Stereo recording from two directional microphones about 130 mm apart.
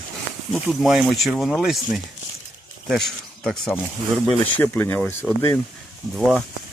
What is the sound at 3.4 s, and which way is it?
Speech, 5° left (ahead or behind).